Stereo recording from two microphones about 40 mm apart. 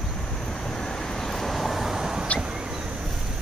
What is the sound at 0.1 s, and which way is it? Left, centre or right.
Vehicle, centre.